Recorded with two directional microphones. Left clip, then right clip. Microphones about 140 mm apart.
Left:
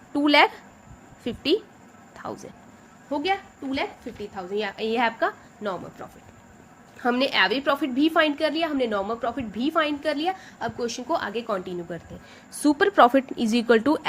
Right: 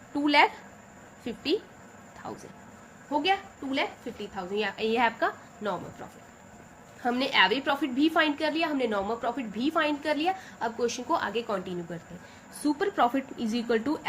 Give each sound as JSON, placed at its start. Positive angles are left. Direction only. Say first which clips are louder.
{"t": 0.1, "sound": "a sound", "louder": "left 4 dB", "side_deg": 60}
{"t": 1.2, "sound": "speech", "louder": "left 5 dB", "side_deg": 55}
{"t": 3.1, "sound": "a woman's voice", "louder": "left 1 dB", "side_deg": 40}
{"t": 7.0, "sound": "a woman's voice", "louder": "left 2 dB", "side_deg": 55}
{"t": 12.6, "sound": "a woman's voice", "louder": "left 8 dB", "side_deg": 85}